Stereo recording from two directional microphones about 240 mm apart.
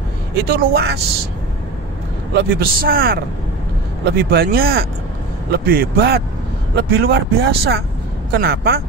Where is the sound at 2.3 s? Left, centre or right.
Right.